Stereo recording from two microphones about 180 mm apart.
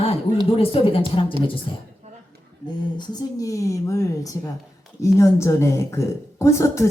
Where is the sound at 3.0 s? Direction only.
20° left (ahead or behind).